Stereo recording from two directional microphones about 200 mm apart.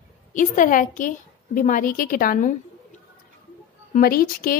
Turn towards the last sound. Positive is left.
turn(degrees=45)  # may be behind; listen again after turning